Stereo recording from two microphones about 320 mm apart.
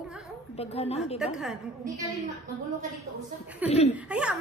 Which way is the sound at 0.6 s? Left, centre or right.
Centre.